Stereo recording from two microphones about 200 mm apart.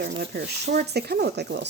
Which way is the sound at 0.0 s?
55° right (ahead or behind).